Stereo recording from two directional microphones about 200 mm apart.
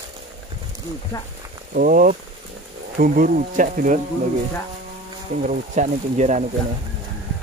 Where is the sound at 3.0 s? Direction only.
45° right (ahead or behind).